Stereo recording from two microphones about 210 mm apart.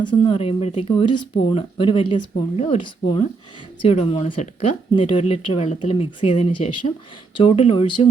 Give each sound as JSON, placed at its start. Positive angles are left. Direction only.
{"t": 0.0, "sound": "speech", "side_deg": 20}